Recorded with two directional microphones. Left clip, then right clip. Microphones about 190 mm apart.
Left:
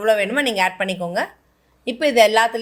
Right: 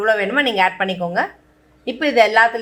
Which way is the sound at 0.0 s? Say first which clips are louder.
Right 1 dB; 40° left (ahead or behind).